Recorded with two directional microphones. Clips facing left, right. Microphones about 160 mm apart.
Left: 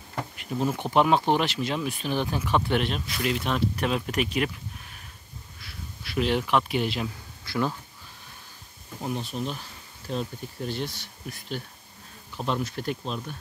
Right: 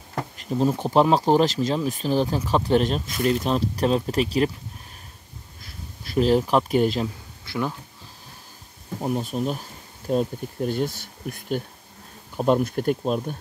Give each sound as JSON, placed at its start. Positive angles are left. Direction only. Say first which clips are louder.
{"t": 0.4, "sound": "speech", "louder": "right 5 dB", "side_deg": -35}
{"t": 5.6, "sound": "speech", "louder": "right 1 dB", "side_deg": -40}
{"t": 7.4, "sound": "speech", "louder": "even", "side_deg": -15}
{"t": 9.0, "sound": "speech", "louder": "right 5 dB", "side_deg": -45}